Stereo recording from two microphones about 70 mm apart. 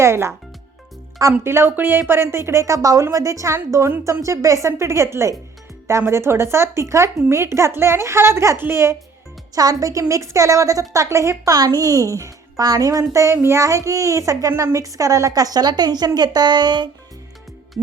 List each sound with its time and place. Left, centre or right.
0.0 s speech: right
1.5 s a woman's voice: right
9.6 s a woman's voice: right
11.5 s a child's voice: right
13.3 s speech: right
13.6 s a woman's voice: right